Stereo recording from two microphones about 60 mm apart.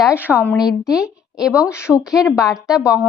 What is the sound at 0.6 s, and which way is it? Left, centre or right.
Speech, centre.